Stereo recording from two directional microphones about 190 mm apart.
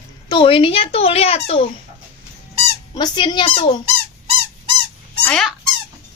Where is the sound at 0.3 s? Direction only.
25° left (ahead or behind).